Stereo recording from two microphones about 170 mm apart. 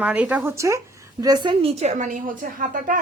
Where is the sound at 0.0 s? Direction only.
10° right (ahead or behind).